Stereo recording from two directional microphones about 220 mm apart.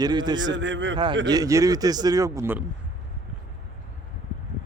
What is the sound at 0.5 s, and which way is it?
Speech, 55° right (ahead or behind).